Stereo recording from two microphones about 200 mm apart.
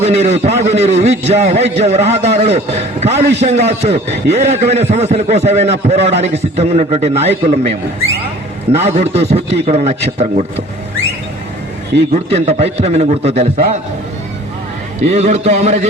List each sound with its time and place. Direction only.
0.0 s a man's voice: 35° right (ahead or behind)
8.8 s a man's voice: 30° right (ahead or behind)
12.1 s a man's voice: 30° right (ahead or behind)
15.0 s a man's voice: 35° right (ahead or behind)